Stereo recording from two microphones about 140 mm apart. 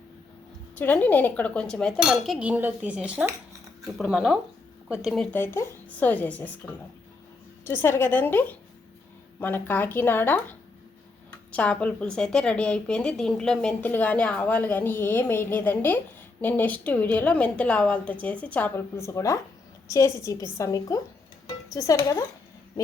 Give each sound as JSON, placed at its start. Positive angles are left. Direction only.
{"t": 0.8, "sound": "a woman's voice", "side_deg": 10}
{"t": 2.0, "sound": "dishes", "side_deg": 0}
{"t": 3.9, "sound": "a woman's voice", "side_deg": -5}
{"t": 5.3, "sound": "a woman's voice", "side_deg": 15}
{"t": 11.5, "sound": "a woman's voice", "side_deg": 10}